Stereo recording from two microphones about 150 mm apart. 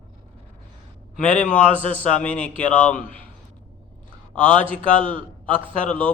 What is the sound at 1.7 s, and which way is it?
Speech, 40° right (ahead or behind).